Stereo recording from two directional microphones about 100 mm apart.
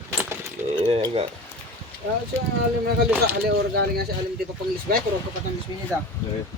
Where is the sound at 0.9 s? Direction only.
75° right (ahead or behind).